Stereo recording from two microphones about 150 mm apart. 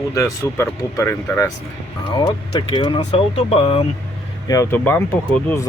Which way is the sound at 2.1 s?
35° left (ahead or behind).